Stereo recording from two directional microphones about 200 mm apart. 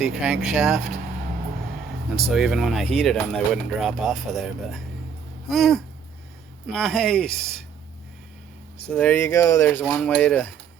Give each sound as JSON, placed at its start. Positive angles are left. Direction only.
{"t": 0.0, "sound": "speech", "side_deg": -5}
{"t": 2.3, "sound": "speech", "side_deg": 0}
{"t": 8.9, "sound": "speech", "side_deg": 5}